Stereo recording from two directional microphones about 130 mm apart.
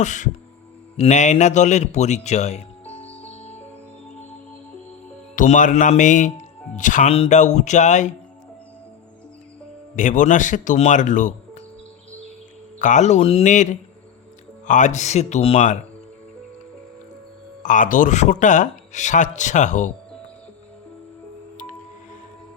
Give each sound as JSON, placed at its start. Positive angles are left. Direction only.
{"t": 0.0, "sound": "a man's voice", "side_deg": 70}
{"t": 2.9, "sound": "music", "side_deg": 55}
{"t": 5.4, "sound": "speech", "side_deg": 80}
{"t": 7.0, "sound": "a man's voice", "side_deg": 50}
{"t": 9.9, "sound": "speech", "side_deg": 80}
{"t": 12.8, "sound": "a man's voice", "side_deg": 65}
{"t": 17.6, "sound": "speech", "side_deg": 80}